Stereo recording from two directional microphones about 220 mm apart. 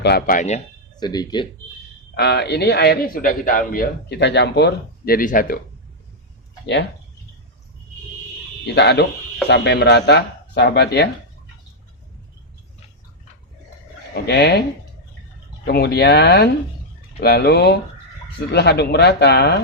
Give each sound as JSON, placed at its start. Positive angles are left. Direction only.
{"t": 0.0, "sound": "speech", "side_deg": 45}
{"t": 0.9, "sound": "speech", "side_deg": 20}
{"t": 2.1, "sound": "a man's voice", "side_deg": 45}
{"t": 8.6, "sound": "a man's voice", "side_deg": 50}
{"t": 14.3, "sound": "a man's voice", "side_deg": 50}
{"t": 15.6, "sound": "a man's voice", "side_deg": 50}